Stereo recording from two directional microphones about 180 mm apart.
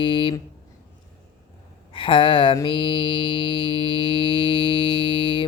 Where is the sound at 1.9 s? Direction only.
30° left (ahead or behind).